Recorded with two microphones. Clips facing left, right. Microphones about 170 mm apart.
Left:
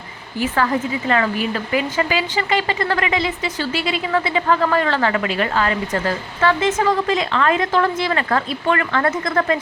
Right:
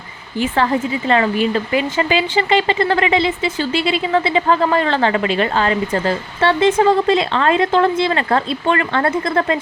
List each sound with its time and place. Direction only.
0.3 s a woman's voice: 25° right (ahead or behind)